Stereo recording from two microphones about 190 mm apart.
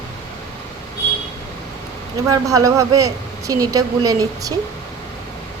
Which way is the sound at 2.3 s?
15° right (ahead or behind).